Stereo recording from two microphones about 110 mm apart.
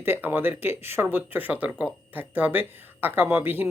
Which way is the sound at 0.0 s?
20° right (ahead or behind).